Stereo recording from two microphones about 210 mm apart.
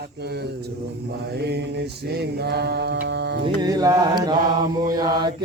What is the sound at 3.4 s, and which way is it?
Mantra, 20° right (ahead or behind).